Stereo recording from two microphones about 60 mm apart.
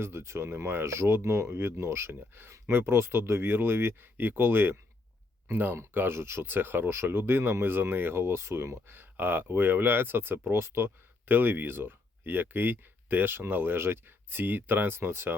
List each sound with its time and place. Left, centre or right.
0.0 s speech: right
9.0 s speech: right